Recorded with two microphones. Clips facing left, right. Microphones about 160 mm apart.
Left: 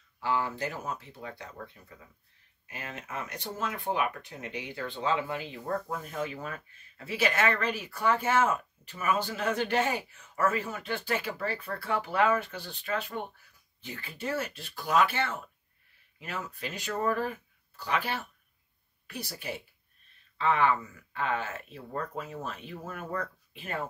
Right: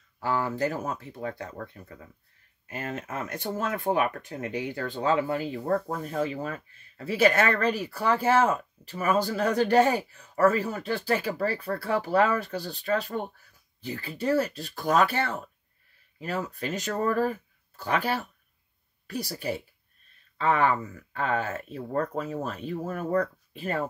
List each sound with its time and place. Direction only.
0.2 s speech: 45° right (ahead or behind)